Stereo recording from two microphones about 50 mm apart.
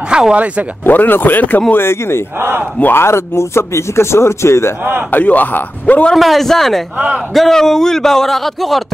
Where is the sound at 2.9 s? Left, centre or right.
Left.